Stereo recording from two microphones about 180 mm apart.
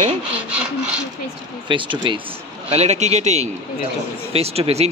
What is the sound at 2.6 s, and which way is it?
A man's voice, 35° right (ahead or behind).